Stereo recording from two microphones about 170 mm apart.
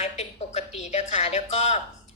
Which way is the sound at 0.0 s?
40° left (ahead or behind).